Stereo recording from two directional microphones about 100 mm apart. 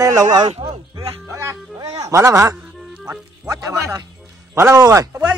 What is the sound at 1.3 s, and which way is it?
Music, 25° right (ahead or behind).